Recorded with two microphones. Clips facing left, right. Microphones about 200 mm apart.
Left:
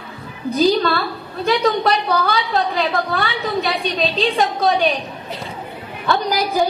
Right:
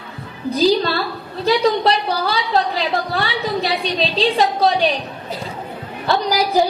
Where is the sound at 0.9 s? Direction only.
30° right (ahead or behind).